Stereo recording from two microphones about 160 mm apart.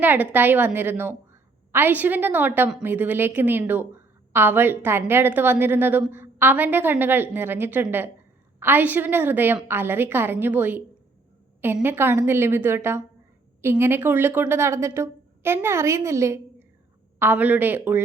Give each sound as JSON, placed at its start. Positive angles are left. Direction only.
{"t": 0.0, "sound": "a woman's voice", "side_deg": -10}